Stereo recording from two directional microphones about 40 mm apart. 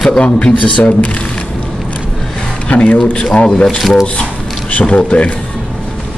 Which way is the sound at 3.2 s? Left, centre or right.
Left.